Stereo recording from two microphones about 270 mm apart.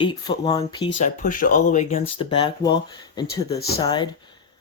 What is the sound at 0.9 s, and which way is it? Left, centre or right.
Speech, left.